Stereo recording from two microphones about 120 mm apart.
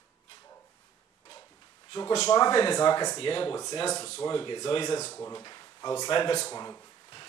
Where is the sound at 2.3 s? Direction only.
40° left (ahead or behind).